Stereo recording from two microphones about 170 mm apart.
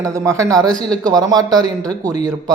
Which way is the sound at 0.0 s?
20° right (ahead or behind).